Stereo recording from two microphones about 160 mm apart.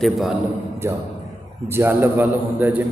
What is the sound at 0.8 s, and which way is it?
A man's voice, 15° right (ahead or behind).